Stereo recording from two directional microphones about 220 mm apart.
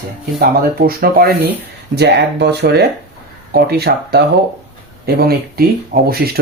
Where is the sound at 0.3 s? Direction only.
40° right (ahead or behind).